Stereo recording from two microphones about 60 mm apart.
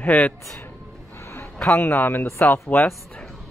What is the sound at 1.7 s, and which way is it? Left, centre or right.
A man's voice, left.